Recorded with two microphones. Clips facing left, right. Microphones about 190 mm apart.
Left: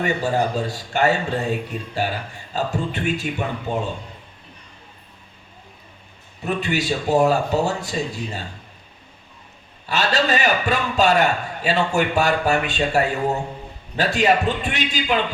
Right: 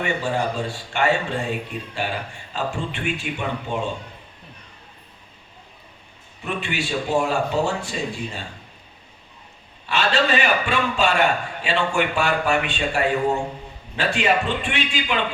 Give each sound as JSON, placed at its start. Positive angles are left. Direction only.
{"t": 0.0, "sound": "speech", "side_deg": 40}
{"t": 6.4, "sound": "speech", "side_deg": 40}
{"t": 9.8, "sound": "a man's voice", "side_deg": 40}